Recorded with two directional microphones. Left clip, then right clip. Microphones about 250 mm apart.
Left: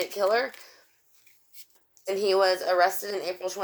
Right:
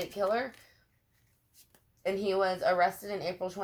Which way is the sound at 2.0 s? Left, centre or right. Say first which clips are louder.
Left 6 dB; left.